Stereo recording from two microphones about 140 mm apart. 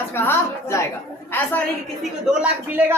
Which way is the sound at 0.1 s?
15° left (ahead or behind).